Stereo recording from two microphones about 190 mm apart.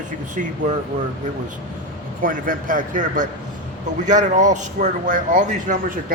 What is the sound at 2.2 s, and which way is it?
A man's voice, 45° right (ahead or behind).